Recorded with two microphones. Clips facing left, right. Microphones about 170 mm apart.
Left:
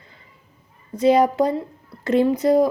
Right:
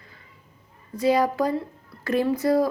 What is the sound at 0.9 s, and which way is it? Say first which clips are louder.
A woman's voice: left 5 dB; 20° left (ahead or behind).